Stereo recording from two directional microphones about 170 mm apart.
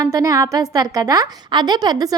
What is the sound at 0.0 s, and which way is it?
A woman's voice, 20° right (ahead or behind).